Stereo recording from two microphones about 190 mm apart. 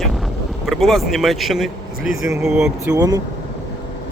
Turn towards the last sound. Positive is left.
turn(degrees=-20)  # may be behind; listen again after turning